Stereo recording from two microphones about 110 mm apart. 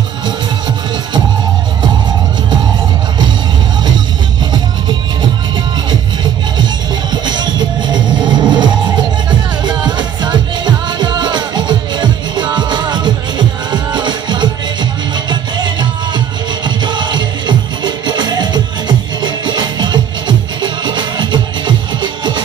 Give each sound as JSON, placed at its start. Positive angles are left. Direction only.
{"t": 6.6, "sound": "music", "side_deg": -40}